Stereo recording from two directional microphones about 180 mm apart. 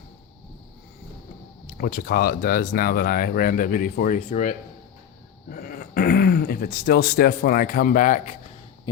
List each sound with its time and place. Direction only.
1.6 s speech: 55° left (ahead or behind)